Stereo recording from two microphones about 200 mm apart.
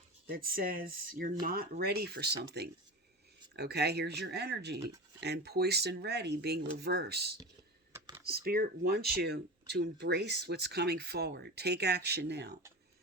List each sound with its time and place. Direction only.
0.3 s speech: 45° right (ahead or behind)
7.9 s computer keyboard: 15° right (ahead or behind)
8.3 s speech: 50° right (ahead or behind)